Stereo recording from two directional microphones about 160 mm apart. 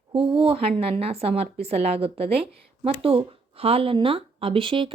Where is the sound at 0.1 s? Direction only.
35° right (ahead or behind).